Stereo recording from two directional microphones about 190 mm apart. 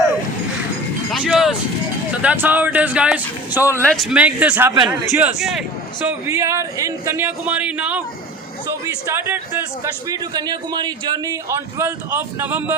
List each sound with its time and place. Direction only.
1.2 s a sound: centre (ahead or behind)
2.2 s a man's voice: 10° right (ahead or behind)
3.8 s a man's voice: 5° left (ahead or behind)
6.2 s a man's voice: 15° right (ahead or behind)
9.0 s a man's voice: 15° right (ahead or behind)